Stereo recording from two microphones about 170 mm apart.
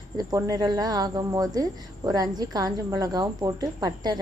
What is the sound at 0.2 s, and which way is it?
A woman's voice, 20° right (ahead or behind).